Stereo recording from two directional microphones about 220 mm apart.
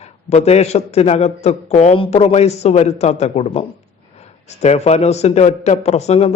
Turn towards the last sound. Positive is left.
turn(degrees=30)  # may be behind; listen again after turning